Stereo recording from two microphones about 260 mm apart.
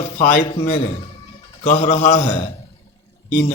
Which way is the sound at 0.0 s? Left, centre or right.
Left.